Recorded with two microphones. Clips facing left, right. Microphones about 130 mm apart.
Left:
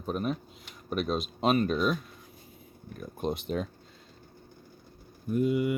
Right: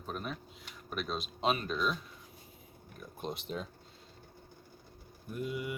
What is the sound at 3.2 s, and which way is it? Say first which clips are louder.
Speech: left 8 dB; 55° left (ahead or behind).